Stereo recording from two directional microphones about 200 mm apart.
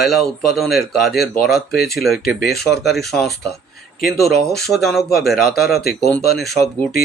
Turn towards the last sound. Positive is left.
turn(degrees=0)  # may be behind; listen again after turning